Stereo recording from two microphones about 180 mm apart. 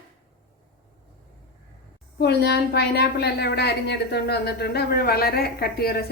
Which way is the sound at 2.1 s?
65° left (ahead or behind).